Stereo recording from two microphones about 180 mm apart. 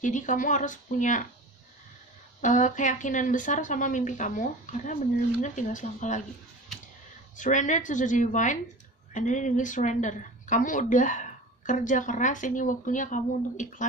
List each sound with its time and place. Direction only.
0.0 s speech: 45° left (ahead or behind)
2.4 s speech: 45° left (ahead or behind)
7.3 s speech: 45° left (ahead or behind)